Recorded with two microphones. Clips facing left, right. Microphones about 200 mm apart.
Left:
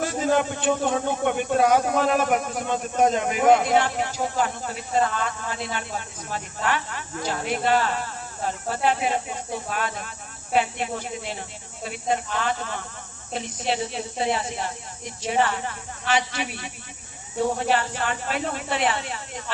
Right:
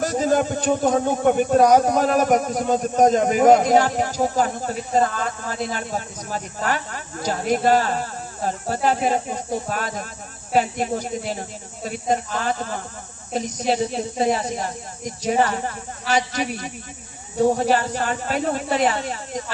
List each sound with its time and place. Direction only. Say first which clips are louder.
0.0 s a man's voice: right 3 dB; 40° right (ahead or behind)